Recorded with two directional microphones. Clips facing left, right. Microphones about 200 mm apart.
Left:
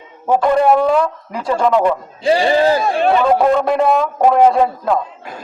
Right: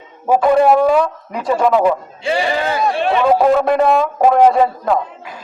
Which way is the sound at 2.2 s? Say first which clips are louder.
Left 6 dB; 35° left (ahead or behind).